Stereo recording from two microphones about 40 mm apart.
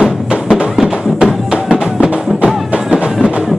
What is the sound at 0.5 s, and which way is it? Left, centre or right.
Music, centre.